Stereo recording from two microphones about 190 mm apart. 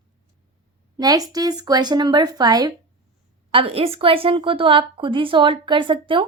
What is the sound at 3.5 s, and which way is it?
A woman's voice, 30° right (ahead or behind).